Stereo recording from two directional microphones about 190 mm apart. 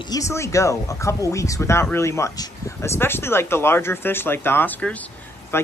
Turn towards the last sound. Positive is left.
turn(degrees=15)  # may be behind; listen again after turning